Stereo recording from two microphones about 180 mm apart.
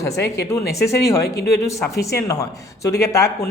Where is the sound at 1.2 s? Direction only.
60° left (ahead or behind).